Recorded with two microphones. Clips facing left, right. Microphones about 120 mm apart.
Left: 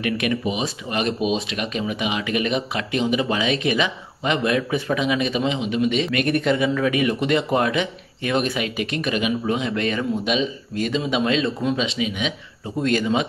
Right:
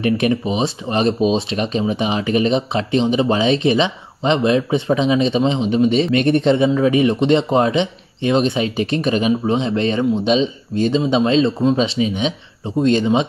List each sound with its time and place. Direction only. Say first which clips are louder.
0.0 s speech: right 5 dB; 30° right (ahead or behind)